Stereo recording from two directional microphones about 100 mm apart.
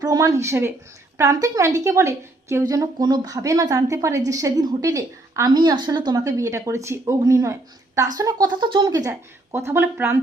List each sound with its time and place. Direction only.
0.0 s a woman's voice: 35° right (ahead or behind)
9.5 s speech: 25° right (ahead or behind)